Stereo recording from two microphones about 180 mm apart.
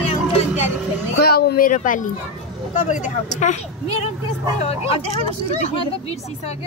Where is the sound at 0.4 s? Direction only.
40° left (ahead or behind).